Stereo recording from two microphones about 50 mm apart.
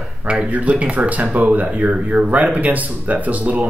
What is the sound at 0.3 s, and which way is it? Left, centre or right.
Speech, right.